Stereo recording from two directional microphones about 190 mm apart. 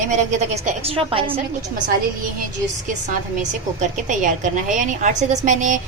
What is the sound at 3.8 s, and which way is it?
A woman's voice, 40° right (ahead or behind).